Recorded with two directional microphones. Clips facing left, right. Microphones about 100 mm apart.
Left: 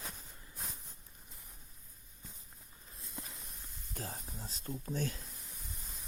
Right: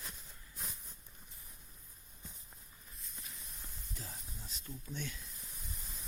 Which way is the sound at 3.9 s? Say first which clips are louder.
Left 7 dB; 50° left (ahead or behind).